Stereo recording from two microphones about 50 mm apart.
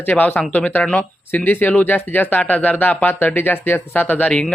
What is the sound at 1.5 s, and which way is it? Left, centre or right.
Speech, left.